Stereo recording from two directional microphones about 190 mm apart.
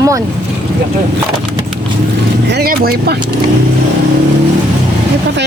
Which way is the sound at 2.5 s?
55° right (ahead or behind).